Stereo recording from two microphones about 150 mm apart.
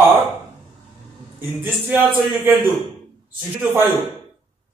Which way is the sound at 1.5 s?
15° right (ahead or behind).